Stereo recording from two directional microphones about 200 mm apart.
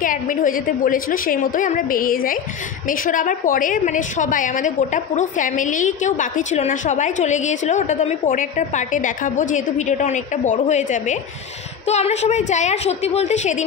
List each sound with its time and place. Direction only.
0.0 s a woman's voice: 40° left (ahead or behind)